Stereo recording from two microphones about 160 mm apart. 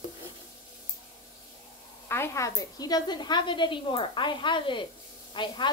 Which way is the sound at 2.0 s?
15° left (ahead or behind).